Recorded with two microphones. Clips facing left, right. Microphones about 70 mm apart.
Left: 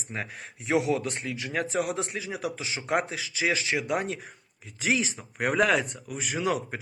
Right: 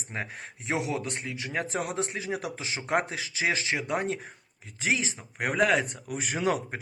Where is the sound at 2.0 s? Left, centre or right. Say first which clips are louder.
Right 1 dB; right.